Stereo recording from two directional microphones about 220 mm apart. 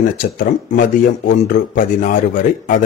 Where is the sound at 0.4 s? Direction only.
40° left (ahead or behind).